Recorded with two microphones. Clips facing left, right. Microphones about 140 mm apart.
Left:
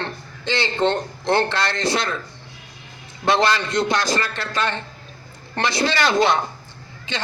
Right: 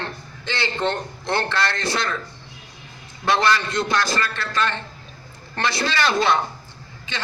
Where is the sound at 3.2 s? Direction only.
20° left (ahead or behind).